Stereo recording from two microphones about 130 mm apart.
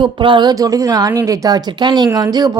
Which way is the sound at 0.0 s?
40° right (ahead or behind).